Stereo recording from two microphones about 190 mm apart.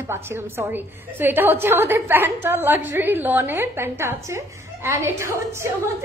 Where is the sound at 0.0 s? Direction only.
15° right (ahead or behind).